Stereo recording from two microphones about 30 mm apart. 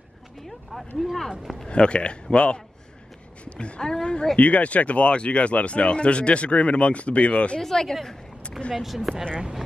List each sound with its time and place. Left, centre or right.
0.4 s speech: centre
1.7 s a woman's voice: left
4.4 s speech: left
7.6 s a woman's voice: centre
8.7 s speech: centre
9.1 s speech: left